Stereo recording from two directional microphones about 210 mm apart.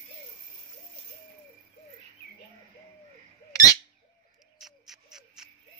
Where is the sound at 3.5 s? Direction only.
15° left (ahead or behind).